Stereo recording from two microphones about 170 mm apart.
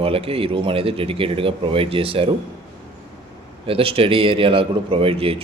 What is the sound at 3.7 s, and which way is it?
Speech, 35° right (ahead or behind).